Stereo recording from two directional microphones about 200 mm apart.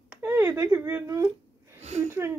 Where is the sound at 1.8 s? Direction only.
35° right (ahead or behind).